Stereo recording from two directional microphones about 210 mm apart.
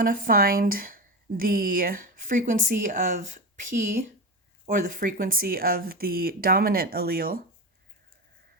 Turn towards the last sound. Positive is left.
turn(degrees=-45)  # may be behind; listen again after turning